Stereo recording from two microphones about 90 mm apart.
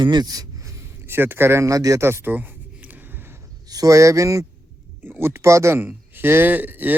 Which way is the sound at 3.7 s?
40° right (ahead or behind).